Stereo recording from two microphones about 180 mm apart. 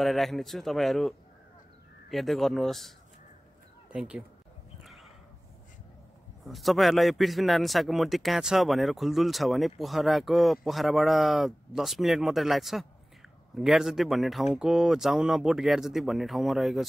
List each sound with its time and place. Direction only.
0.0 s a man's voice: centre (ahead or behind)
3.9 s speech: 5° right (ahead or behind)
4.8 s dog: centre (ahead or behind)
6.4 s a man's voice: centre (ahead or behind)